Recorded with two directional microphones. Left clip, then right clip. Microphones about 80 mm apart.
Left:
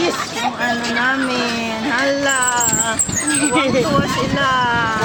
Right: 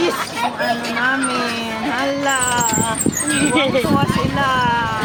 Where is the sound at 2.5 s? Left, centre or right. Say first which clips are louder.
Even; left.